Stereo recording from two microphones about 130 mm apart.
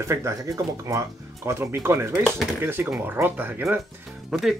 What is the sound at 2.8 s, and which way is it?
Speech, 5° right (ahead or behind).